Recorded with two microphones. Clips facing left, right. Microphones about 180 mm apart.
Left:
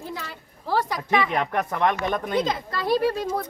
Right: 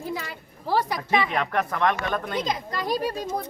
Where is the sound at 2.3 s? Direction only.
15° right (ahead or behind).